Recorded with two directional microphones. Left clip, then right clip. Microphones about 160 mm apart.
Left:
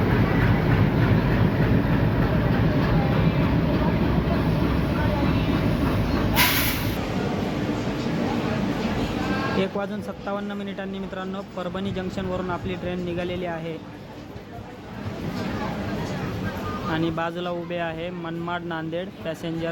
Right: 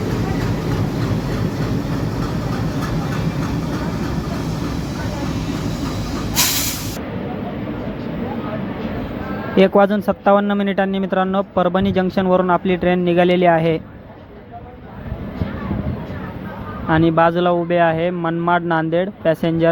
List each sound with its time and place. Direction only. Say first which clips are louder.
9.6 s speech: right 14 dB; 45° right (ahead or behind)
16.9 s speech: right 13 dB; 45° right (ahead or behind)